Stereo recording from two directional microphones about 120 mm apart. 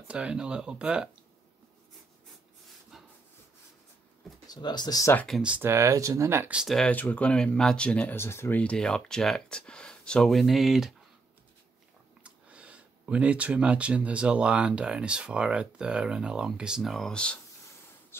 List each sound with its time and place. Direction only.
0.1 s speech: 10° right (ahead or behind)
2.9 s rub: 5° right (ahead or behind)
4.5 s speech: 35° left (ahead or behind)
5.1 s speech: 5° left (ahead or behind)
5.6 s speech: 25° right (ahead or behind)
6.5 s speech: centre (ahead or behind)
6.9 s speech: 15° left (ahead or behind)
12.2 s speech: 10° right (ahead or behind); by 17.4 s 10° left (ahead or behind)